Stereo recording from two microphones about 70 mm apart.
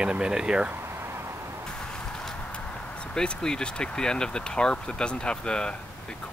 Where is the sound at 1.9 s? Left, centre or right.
Centre.